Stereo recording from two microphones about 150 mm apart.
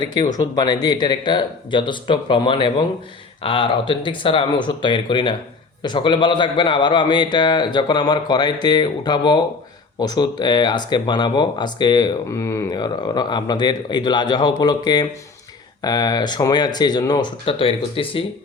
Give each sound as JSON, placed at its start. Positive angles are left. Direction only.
{"t": 0.0, "sound": "a man's voice", "side_deg": 25}